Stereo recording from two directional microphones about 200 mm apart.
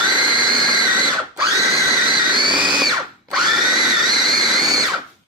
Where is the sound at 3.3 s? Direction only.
Centre (ahead or behind).